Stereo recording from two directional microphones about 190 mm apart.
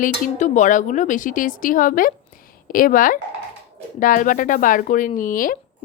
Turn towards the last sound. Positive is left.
turn(degrees=45)  # may be behind; listen again after turning